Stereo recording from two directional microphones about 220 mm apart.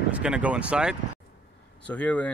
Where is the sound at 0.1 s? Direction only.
5° right (ahead or behind).